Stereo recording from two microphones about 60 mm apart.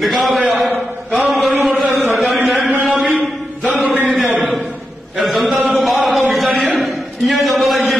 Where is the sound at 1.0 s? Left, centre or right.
Centre.